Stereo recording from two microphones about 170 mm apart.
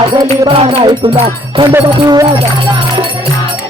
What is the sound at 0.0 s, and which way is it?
Music, 25° right (ahead or behind).